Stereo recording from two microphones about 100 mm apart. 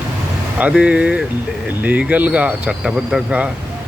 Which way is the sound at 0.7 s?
10° right (ahead or behind).